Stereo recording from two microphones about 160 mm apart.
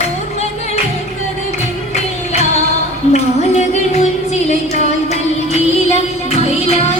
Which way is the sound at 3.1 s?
45° left (ahead or behind).